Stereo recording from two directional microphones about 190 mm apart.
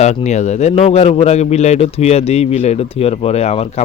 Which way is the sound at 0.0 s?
35° left (ahead or behind).